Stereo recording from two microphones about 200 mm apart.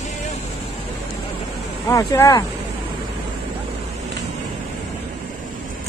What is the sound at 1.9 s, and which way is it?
Speech, 15° left (ahead or behind).